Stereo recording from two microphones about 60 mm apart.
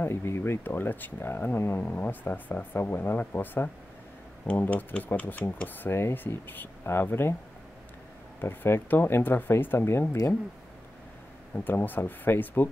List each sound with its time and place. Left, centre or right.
0.0 s speech: left
8.4 s speech: left
11.5 s speech: left